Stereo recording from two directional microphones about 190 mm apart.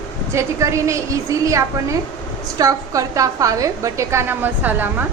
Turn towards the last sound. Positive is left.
turn(degrees=-10)  # may be behind; listen again after turning